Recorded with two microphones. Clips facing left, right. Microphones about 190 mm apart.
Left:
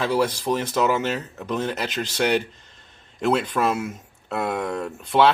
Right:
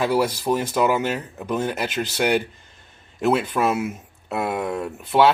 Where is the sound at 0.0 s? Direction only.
10° right (ahead or behind).